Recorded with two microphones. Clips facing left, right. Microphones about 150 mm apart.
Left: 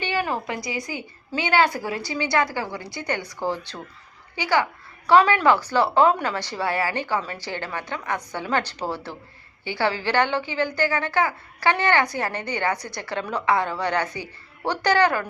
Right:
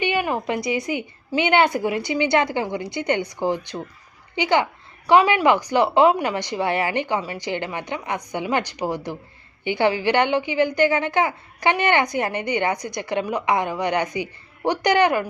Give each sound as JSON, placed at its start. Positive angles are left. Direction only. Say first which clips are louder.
{"t": 0.0, "sound": "a woman's voice", "louder": "right 3 dB", "side_deg": -15}